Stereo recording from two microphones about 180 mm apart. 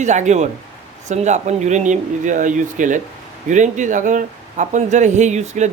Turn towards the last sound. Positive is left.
turn(degrees=-40)  # may be behind; listen again after turning